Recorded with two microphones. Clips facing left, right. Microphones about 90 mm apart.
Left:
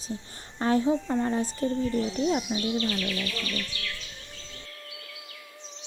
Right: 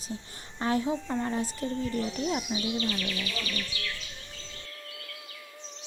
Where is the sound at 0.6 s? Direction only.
30° left (ahead or behind).